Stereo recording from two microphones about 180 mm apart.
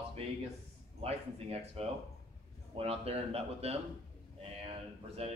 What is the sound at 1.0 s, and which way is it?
A man's voice, 35° right (ahead or behind).